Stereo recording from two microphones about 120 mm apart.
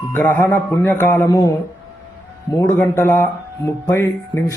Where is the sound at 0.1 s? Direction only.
20° left (ahead or behind).